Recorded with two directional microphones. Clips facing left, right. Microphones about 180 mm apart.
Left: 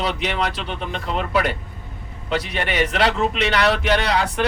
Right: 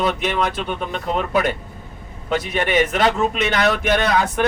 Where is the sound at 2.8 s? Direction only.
45° right (ahead or behind).